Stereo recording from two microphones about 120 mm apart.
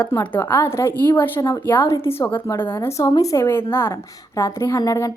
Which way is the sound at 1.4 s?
25° left (ahead or behind).